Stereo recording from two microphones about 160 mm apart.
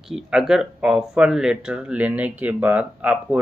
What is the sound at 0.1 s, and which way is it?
Speech, 5° right (ahead or behind).